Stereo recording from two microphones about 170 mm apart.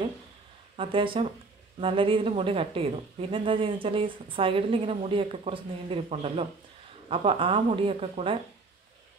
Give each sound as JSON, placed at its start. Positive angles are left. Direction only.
{"t": 0.7, "sound": "a woman's voice", "side_deg": -30}